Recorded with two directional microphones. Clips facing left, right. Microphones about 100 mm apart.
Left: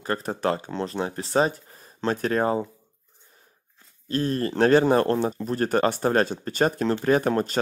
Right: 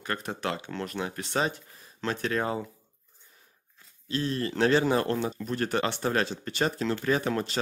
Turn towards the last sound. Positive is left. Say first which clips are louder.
# left 6 dB
turn(degrees=45)  # may be behind; listen again after turning